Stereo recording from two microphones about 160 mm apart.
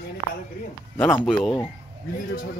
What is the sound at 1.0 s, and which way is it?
Speech, 10° left (ahead or behind).